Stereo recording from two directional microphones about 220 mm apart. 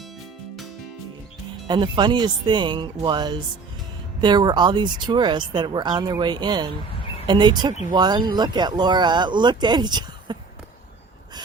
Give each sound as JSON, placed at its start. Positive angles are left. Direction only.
{"t": 1.6, "sound": "speech", "side_deg": -20}